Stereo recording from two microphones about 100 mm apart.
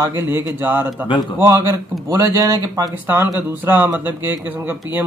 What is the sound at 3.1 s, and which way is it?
Speech, 20° right (ahead or behind).